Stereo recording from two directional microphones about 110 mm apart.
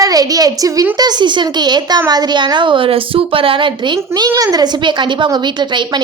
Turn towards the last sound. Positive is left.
turn(degrees=-45)  # may be behind; listen again after turning